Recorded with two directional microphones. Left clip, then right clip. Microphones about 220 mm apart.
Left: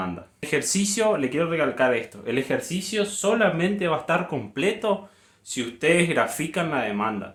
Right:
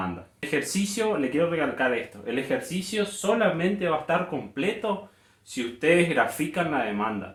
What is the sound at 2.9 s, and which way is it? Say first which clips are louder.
Speech: left 2 dB; 50° left (ahead or behind).